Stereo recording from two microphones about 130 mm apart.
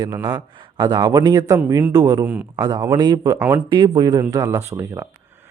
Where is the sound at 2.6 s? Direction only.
30° right (ahead or behind).